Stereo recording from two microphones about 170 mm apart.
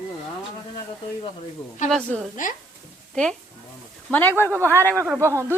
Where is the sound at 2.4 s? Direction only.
50° left (ahead or behind).